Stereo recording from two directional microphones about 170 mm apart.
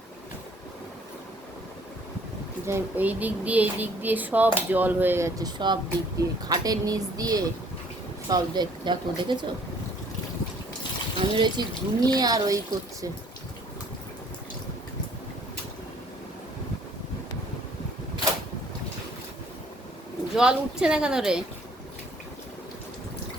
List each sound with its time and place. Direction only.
2.6 s speech: 10° right (ahead or behind)
11.2 s speech: 30° right (ahead or behind)
20.3 s speech: 5° right (ahead or behind)